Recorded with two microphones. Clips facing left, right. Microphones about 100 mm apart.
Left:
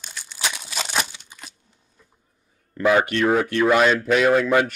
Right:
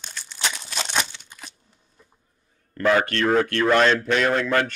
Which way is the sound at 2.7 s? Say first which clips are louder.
Left 2 dB; 10° left (ahead or behind).